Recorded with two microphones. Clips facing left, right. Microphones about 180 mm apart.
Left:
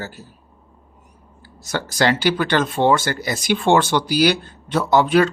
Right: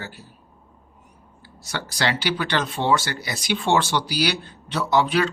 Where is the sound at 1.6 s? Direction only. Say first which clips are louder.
Left 6 dB; 45° left (ahead or behind).